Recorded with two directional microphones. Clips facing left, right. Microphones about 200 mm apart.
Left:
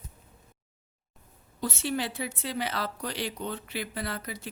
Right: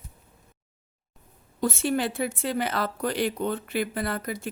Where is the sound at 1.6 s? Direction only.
50° right (ahead or behind).